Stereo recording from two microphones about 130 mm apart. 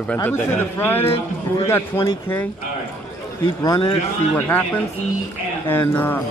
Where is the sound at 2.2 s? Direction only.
15° left (ahead or behind).